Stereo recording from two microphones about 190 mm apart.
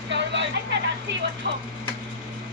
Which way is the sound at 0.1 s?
70° right (ahead or behind).